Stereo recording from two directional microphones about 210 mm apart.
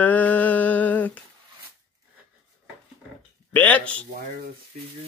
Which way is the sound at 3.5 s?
5° left (ahead or behind).